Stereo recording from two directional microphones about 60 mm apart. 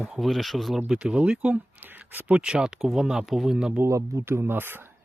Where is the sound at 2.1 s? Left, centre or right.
Right.